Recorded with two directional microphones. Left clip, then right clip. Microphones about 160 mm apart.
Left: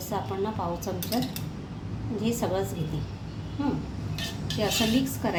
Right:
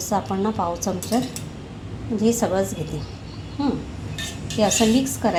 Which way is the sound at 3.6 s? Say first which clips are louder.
Right 5 dB; 45° right (ahead or behind).